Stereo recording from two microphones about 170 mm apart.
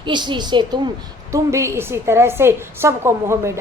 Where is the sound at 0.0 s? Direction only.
25° right (ahead or behind).